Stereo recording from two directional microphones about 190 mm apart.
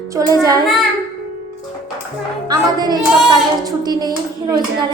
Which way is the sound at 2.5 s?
20° right (ahead or behind).